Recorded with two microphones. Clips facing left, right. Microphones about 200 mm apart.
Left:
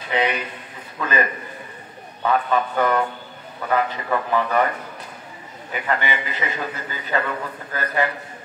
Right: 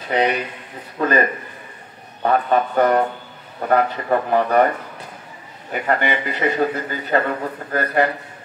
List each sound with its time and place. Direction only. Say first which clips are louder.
0.1 s a man's voice: right 3 dB; 45° right (ahead or behind)
2.2 s a man's voice: right 3 dB; 40° right (ahead or behind)
5.7 s a man's voice: right 4 dB; 50° right (ahead or behind)